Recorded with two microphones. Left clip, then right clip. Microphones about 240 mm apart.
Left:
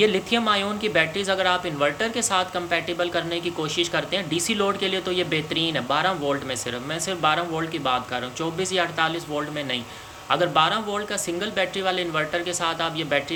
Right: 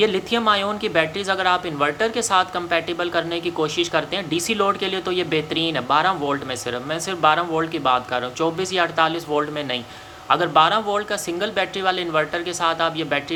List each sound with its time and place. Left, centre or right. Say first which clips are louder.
0.0 s speech: right 2 dB; centre